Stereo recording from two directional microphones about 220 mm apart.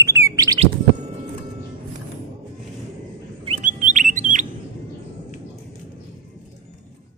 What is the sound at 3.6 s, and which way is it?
Bird, 35° right (ahead or behind).